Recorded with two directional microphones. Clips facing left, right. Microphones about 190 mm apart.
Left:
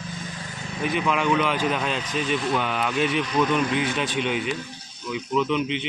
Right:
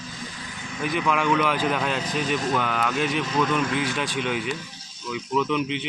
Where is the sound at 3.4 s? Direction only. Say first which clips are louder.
Left 2 dB; 20° left (ahead or behind).